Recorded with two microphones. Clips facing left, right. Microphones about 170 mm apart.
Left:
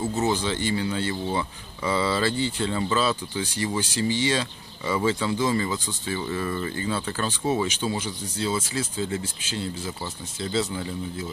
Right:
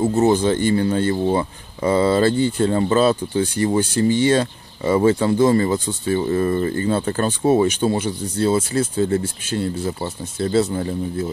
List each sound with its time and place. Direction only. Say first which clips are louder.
0.0 s speech: right 9 dB; 50° right (ahead or behind)